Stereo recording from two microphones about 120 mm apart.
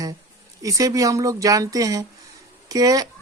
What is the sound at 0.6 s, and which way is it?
A woman's voice, 30° right (ahead or behind).